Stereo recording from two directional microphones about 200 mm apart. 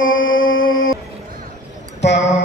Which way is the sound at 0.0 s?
80° left.